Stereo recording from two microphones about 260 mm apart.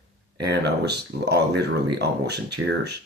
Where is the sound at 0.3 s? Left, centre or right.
Right.